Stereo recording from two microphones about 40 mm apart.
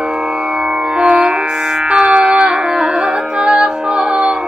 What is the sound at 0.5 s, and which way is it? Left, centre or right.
Music, right.